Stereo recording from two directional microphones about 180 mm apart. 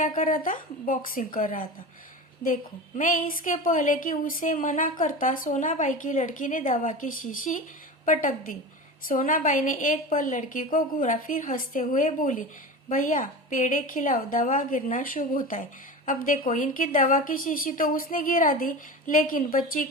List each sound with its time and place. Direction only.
0.2 s a woman's voice: 50° left (ahead or behind)
3.0 s a woman's voice: 50° left (ahead or behind)